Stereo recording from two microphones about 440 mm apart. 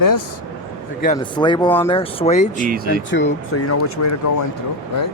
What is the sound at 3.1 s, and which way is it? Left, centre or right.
Speech, left.